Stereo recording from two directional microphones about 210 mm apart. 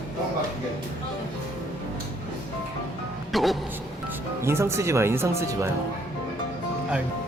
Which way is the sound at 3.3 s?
Centre (ahead or behind).